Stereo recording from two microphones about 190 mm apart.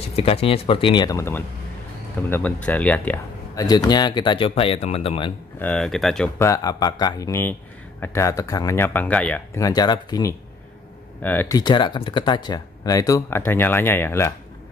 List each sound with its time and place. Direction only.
0.1 s speech: 30° left (ahead or behind); by 3.6 s 10° left (ahead or behind)
3.6 s speech: 20° left (ahead or behind)
5.6 s speech: 5° left (ahead or behind)
6.3 s speech: 15° left (ahead or behind)
9.7 s speech: 20° left (ahead or behind)